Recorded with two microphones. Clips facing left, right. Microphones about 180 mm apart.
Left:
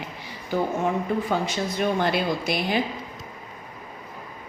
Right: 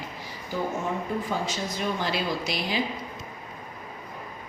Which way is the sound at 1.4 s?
60° left (ahead or behind).